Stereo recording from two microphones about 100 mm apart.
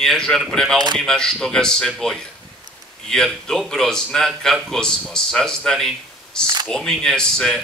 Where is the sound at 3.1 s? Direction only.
5° left (ahead or behind).